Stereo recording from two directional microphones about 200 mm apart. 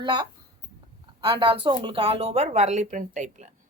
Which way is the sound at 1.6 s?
25° right (ahead or behind).